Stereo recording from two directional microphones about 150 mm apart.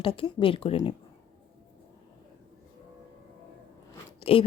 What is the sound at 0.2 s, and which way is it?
Speech, 35° left (ahead or behind).